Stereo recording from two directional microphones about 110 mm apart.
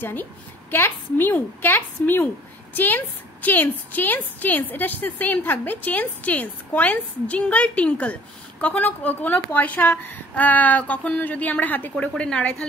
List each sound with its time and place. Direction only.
0.0 s a woman's voice: 15° left (ahead or behind)